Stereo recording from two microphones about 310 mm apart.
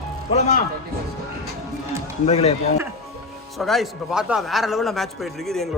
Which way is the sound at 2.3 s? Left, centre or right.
Centre.